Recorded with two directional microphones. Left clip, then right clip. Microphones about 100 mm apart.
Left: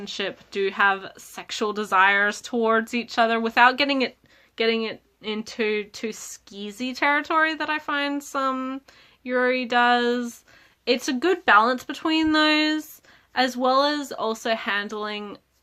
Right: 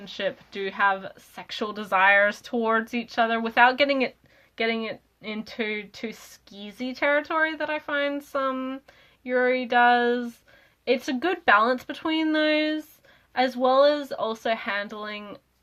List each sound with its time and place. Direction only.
0.0 s speech: 45° left (ahead or behind)